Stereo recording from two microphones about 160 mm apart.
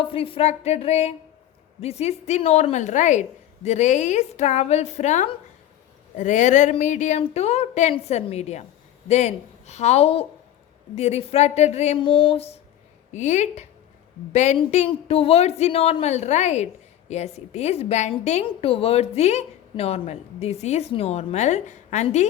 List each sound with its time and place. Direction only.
0.0 s a woman's voice: 35° left (ahead or behind)
12.0 s a woman's voice: 30° left (ahead or behind)
13.1 s a woman's voice: 45° left (ahead or behind)